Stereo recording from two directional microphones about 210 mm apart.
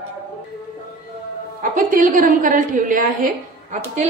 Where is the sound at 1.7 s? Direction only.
40° right (ahead or behind).